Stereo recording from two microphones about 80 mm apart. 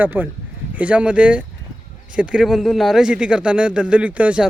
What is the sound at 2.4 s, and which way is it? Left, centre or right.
A man's voice, centre.